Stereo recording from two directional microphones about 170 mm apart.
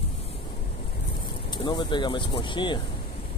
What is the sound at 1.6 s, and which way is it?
Speech, 25° left (ahead or behind).